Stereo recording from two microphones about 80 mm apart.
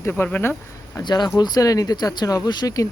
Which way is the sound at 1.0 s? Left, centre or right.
Left.